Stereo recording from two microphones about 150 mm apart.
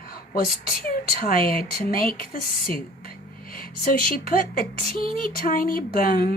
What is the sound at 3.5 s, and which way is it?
Speech, 70° left (ahead or behind).